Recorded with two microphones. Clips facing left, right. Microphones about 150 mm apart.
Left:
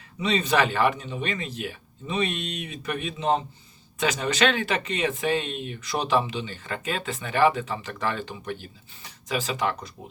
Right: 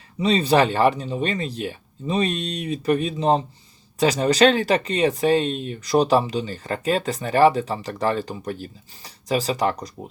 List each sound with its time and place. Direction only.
0.2 s speech: 35° right (ahead or behind)